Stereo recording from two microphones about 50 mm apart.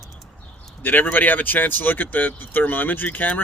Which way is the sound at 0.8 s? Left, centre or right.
Left.